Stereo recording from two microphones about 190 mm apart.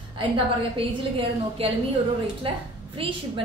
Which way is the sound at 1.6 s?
30° right (ahead or behind).